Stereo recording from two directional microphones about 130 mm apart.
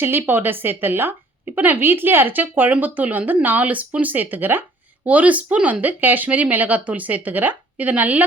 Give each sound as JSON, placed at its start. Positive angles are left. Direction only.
{"t": 0.0, "sound": "speech", "side_deg": -15}